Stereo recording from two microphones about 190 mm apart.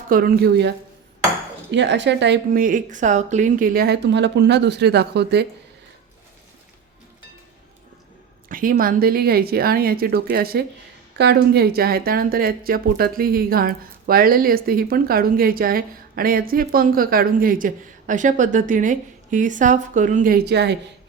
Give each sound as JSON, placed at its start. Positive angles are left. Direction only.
{"t": 0.1, "sound": "a woman's voice", "side_deg": -50}
{"t": 1.7, "sound": "a woman's voice", "side_deg": -65}
{"t": 8.4, "sound": "speech", "side_deg": -45}